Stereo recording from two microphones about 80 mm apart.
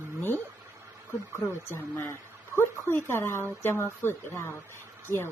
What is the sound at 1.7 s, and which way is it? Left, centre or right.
Speech, left.